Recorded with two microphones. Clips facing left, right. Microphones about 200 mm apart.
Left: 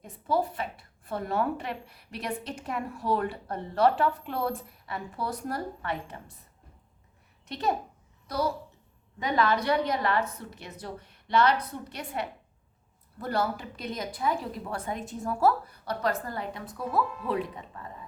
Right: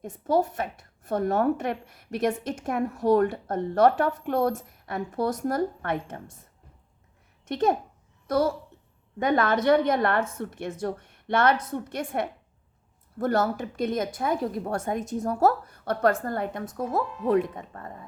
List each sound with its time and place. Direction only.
0.0 s a woman's voice: 45° right (ahead or behind)
7.4 s a woman's voice: 50° right (ahead or behind)